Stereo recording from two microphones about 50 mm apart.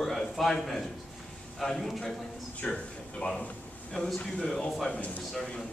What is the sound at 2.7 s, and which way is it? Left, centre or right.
A man's voice, centre.